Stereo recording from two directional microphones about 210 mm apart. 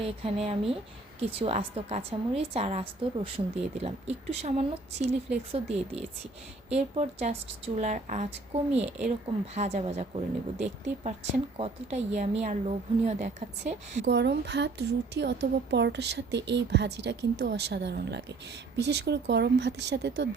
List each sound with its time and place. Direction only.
0.0 s a woman's voice: 30° right (ahead or behind)
14.0 s a woman's voice: 55° right (ahead or behind)